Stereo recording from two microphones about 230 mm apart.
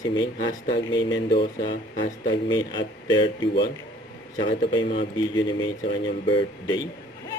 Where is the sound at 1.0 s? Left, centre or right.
Left.